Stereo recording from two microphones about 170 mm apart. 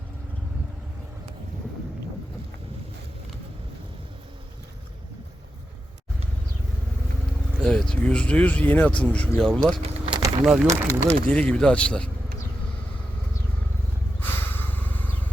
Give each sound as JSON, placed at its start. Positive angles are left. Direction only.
{"t": 7.6, "sound": "speech", "side_deg": 5}
{"t": 9.7, "sound": "vehicle", "side_deg": -25}
{"t": 10.4, "sound": "speech", "side_deg": -5}
{"t": 10.8, "sound": "speech", "side_deg": 5}
{"t": 14.2, "sound": "snort", "side_deg": 10}